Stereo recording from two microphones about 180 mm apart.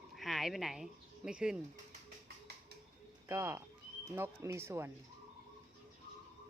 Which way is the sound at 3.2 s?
15° right (ahead or behind).